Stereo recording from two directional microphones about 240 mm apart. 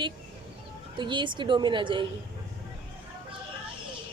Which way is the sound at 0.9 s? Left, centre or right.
Centre.